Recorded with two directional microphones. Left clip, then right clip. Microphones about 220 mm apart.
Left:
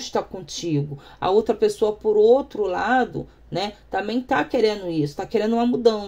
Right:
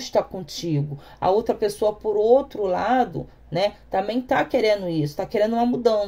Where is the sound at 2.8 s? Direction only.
30° left (ahead or behind).